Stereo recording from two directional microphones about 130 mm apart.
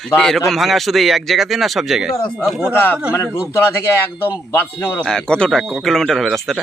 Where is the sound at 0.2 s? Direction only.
Centre (ahead or behind).